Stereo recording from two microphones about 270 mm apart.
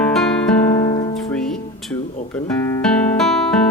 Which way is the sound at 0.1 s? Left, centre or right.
Centre.